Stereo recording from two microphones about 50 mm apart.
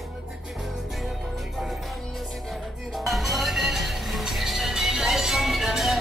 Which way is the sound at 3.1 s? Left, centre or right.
Centre.